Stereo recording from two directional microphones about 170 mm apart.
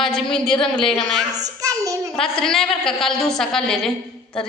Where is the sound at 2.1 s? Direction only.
5° left (ahead or behind).